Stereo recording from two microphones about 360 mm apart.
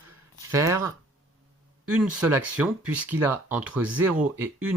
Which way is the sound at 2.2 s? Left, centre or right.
Centre.